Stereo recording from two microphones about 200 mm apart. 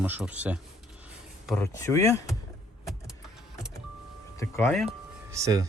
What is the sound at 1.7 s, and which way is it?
Speech, 15° left (ahead or behind).